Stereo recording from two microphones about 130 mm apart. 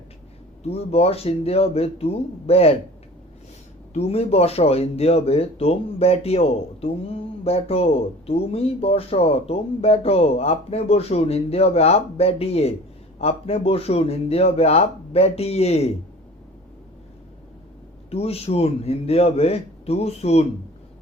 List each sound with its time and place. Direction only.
0.6 s speech: 50° left (ahead or behind)
3.9 s speech: 50° left (ahead or behind)
18.1 s speech: 50° left (ahead or behind)